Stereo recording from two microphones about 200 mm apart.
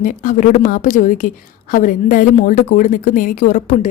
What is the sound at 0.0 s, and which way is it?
A woman's voice, 45° left (ahead or behind).